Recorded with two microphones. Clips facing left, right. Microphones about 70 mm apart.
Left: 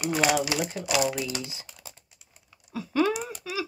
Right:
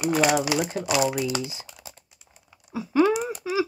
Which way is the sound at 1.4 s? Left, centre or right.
Centre.